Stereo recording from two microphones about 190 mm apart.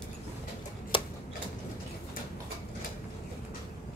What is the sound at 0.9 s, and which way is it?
Typewriter, 25° left (ahead or behind).